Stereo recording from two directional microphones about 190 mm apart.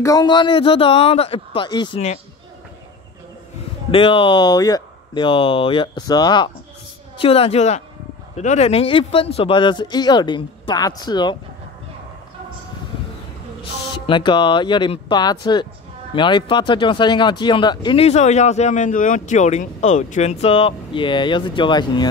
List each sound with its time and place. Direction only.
0.0 s speech: 20° left (ahead or behind)
3.9 s a woman's voice: 25° left (ahead or behind)
13.6 s speech: 25° left (ahead or behind)